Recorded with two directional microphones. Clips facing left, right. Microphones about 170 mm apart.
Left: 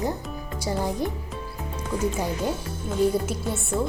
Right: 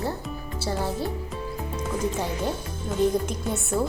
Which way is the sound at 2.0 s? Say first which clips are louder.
Left 2 dB; 10° left (ahead or behind).